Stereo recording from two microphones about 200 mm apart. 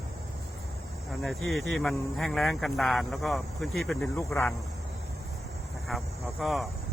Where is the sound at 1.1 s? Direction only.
Centre (ahead or behind).